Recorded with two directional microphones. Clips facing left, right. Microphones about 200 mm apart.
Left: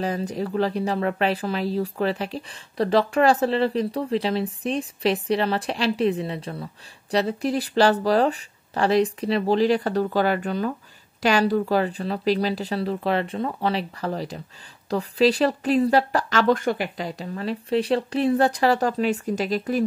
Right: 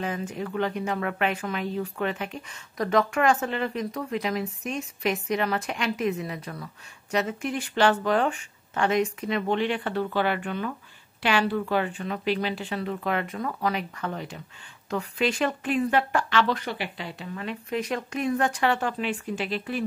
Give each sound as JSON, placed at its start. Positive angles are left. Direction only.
{"t": 0.0, "sound": "speech", "side_deg": 35}